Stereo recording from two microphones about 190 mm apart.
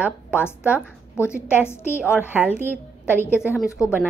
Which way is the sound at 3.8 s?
15° left (ahead or behind).